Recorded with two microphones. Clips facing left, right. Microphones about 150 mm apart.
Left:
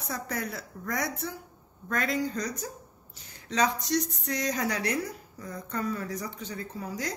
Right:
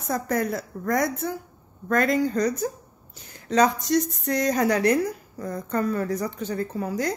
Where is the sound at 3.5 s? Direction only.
50° right (ahead or behind).